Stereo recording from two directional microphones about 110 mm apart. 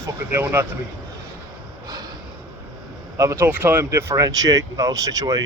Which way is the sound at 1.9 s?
35° right (ahead or behind).